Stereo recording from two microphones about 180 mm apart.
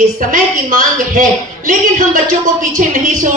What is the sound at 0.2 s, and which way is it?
A woman's voice, 50° right (ahead or behind).